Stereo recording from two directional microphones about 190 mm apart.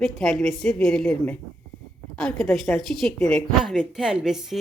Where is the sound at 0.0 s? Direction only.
Centre (ahead or behind).